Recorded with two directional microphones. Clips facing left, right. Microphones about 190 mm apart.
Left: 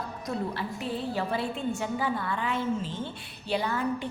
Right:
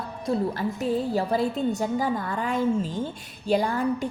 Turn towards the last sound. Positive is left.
turn(degrees=-40)  # may be behind; listen again after turning